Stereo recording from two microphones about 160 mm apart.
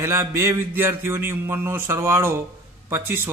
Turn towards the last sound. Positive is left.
turn(degrees=-15)  # may be behind; listen again after turning